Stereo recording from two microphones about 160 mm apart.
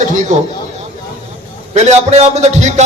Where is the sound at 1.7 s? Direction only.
45° right (ahead or behind).